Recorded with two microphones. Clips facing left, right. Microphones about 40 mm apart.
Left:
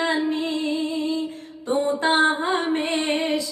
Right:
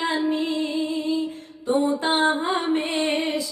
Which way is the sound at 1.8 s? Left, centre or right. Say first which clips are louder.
Left 3 dB; left.